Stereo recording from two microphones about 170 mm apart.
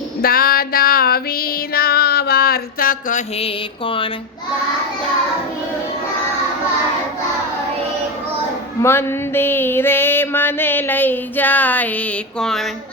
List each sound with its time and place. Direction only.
0.2 s music: 60° left (ahead or behind)
3.4 s mantra: 30° left (ahead or behind)
8.8 s a sound: 15° left (ahead or behind)